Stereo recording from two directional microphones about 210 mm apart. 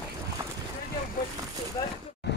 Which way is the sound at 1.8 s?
20° left (ahead or behind).